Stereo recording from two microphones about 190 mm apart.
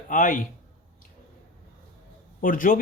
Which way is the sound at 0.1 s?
45° left (ahead or behind).